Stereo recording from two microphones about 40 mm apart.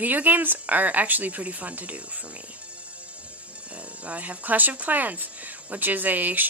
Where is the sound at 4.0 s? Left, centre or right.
Right.